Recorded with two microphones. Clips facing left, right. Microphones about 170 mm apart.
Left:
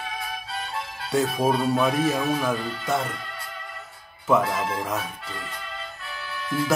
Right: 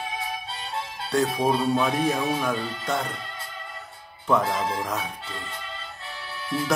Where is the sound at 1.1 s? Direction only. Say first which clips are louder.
Even; 5° left (ahead or behind).